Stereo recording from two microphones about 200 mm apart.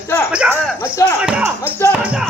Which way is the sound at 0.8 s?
15° left (ahead or behind).